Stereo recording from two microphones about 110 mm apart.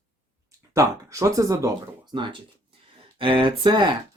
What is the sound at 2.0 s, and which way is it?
Speech, 45° right (ahead or behind).